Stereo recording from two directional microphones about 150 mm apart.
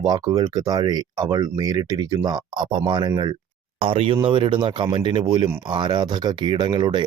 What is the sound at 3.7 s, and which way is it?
Speech, 40° right (ahead or behind).